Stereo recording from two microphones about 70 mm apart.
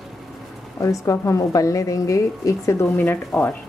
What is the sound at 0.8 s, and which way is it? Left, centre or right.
A woman's voice, left.